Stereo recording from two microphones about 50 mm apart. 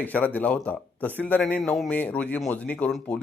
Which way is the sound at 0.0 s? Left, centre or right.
Left.